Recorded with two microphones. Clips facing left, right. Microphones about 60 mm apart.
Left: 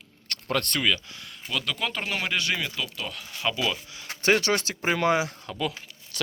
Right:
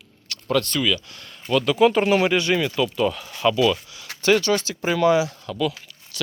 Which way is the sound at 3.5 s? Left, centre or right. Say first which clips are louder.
Right 9 dB; centre.